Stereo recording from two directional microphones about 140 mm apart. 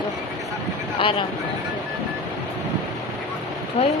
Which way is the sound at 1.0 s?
40° left (ahead or behind).